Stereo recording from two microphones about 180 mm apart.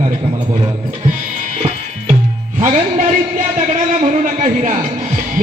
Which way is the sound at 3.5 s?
40° right (ahead or behind).